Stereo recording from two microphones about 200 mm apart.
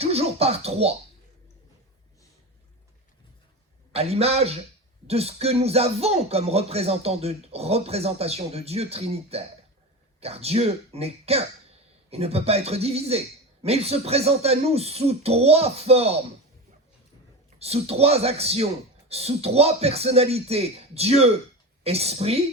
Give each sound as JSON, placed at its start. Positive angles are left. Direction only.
{"t": 0.0, "sound": "speech", "side_deg": -30}
{"t": 3.9, "sound": "speech", "side_deg": -30}
{"t": 17.6, "sound": "speech", "side_deg": -30}